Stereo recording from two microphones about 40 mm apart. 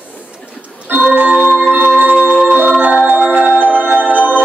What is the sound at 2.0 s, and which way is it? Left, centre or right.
Music, right.